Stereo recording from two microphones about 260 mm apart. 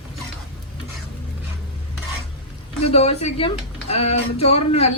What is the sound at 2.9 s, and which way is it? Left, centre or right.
Speech, left.